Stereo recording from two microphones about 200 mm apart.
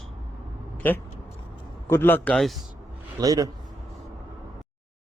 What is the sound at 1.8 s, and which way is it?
Speech, 10° left (ahead or behind).